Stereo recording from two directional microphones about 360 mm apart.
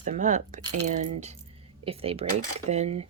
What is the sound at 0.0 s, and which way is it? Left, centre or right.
Speech, right.